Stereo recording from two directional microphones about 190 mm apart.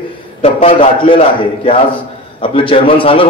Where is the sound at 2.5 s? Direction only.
30° left (ahead or behind).